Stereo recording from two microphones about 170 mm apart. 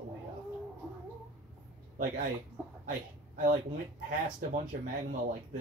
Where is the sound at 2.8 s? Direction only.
50° right (ahead or behind).